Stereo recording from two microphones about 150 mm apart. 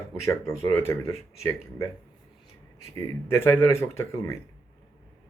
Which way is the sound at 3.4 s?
15° left (ahead or behind).